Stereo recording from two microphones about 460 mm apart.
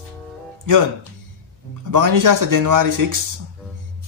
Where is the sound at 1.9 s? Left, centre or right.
Right.